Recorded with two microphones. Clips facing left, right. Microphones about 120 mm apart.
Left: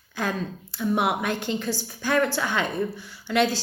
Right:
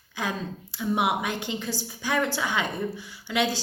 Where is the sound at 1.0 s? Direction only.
55° left (ahead or behind).